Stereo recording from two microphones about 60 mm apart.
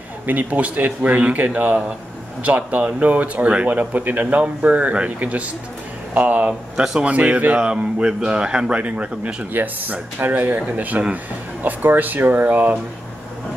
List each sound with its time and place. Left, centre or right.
0.3 s speech: right
6.8 s speech: centre
7.1 s speech: right